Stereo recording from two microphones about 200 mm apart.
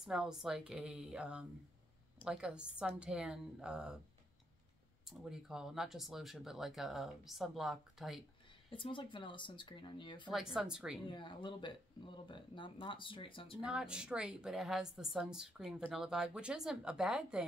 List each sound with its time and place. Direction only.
0.0 s a woman's voice: 5° right (ahead or behind)
5.0 s a woman's voice: centre (ahead or behind)
8.6 s speech: 25° left (ahead or behind)
10.3 s a woman's voice: 5° right (ahead or behind)
11.1 s speech: 25° left (ahead or behind)
13.6 s a woman's voice: 5° right (ahead or behind)